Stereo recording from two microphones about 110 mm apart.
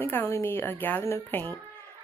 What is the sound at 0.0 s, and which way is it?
Speech, 20° left (ahead or behind).